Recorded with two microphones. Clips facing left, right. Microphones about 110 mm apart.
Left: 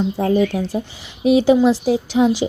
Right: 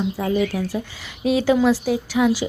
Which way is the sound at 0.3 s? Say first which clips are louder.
Left 4 dB; 25° left (ahead or behind).